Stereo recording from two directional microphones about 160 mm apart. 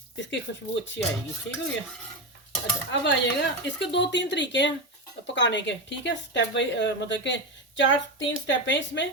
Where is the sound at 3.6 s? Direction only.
90° left.